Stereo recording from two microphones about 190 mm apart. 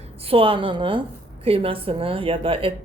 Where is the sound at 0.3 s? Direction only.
30° right (ahead or behind).